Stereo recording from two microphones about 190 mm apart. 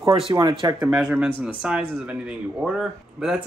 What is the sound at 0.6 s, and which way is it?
Speech, 20° right (ahead or behind).